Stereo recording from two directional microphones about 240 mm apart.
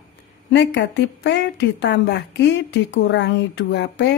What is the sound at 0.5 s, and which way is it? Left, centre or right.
A woman's voice, left.